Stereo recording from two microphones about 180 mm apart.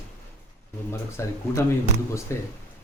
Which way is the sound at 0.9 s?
15° left (ahead or behind).